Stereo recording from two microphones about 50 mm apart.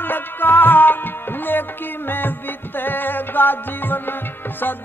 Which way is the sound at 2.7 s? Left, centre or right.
Left.